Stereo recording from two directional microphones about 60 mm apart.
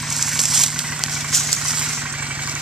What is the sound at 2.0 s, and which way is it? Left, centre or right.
Vehicle, right.